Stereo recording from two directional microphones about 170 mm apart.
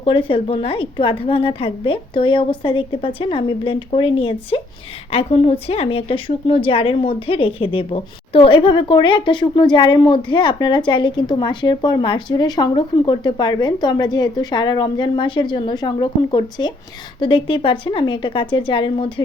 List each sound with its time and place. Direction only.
0.0 s a woman's voice: 30° left (ahead or behind)